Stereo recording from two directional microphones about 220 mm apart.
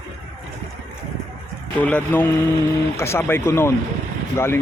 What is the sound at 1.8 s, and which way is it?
Speech, 5° left (ahead or behind).